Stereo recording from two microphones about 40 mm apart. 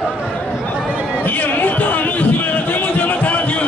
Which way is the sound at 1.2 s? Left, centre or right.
Left.